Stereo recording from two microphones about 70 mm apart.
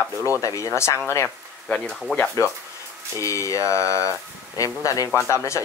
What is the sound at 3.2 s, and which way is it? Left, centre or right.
Speech, left.